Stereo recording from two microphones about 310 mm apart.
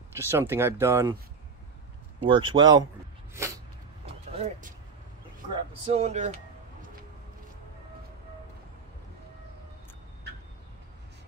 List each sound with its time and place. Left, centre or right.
0.1 s speech: centre
2.2 s speech: centre
3.3 s rub: centre
5.9 s speech: right